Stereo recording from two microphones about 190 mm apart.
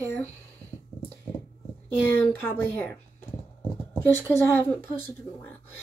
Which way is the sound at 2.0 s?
10° left (ahead or behind).